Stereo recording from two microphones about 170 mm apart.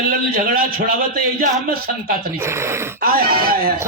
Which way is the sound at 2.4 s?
15° right (ahead or behind).